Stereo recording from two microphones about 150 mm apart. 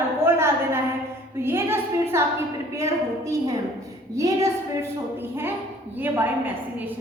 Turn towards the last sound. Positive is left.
turn(degrees=-15)  # may be behind; listen again after turning